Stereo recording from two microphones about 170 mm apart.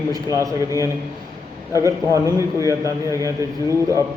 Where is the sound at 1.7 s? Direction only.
20° right (ahead or behind).